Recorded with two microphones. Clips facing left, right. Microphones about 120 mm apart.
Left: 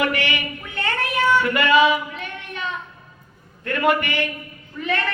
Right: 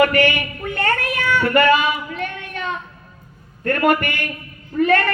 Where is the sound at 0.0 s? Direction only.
45° right (ahead or behind).